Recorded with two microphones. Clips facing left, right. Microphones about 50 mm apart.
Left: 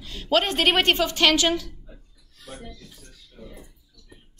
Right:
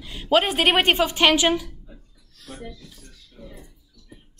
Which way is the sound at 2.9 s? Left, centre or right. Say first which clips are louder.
Even; centre.